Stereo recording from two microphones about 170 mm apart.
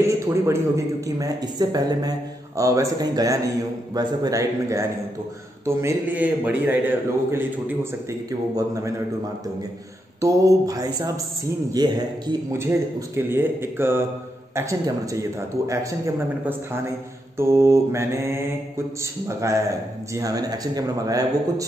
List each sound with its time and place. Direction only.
0.5 s a man's voice: 20° right (ahead or behind)
10.2 s a man's voice: 20° right (ahead or behind)
17.4 s a man's voice: 15° right (ahead or behind)